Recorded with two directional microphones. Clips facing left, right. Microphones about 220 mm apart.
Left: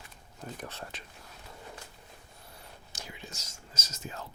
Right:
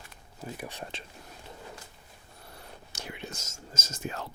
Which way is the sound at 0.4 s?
10° right (ahead or behind).